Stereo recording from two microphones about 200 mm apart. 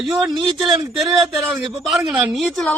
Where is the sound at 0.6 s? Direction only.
25° right (ahead or behind).